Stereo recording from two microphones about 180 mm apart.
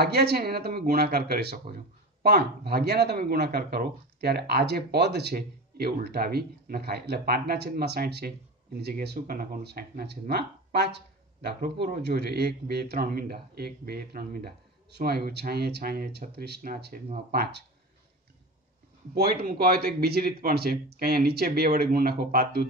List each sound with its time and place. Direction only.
0.0 s speech: 65° right (ahead or behind)
19.1 s speech: 55° right (ahead or behind)